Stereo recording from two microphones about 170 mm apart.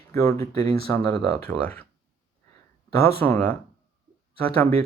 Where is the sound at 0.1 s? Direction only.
20° left (ahead or behind).